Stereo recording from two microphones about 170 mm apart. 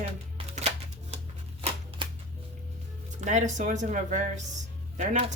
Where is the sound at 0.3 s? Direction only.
40° right (ahead or behind).